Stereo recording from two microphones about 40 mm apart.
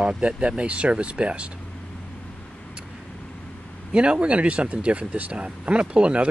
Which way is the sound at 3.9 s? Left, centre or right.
Right.